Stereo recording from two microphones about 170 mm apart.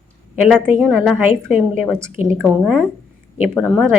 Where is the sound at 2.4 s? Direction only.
Centre (ahead or behind).